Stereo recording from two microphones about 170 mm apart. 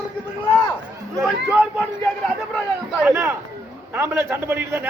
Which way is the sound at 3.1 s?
15° right (ahead or behind).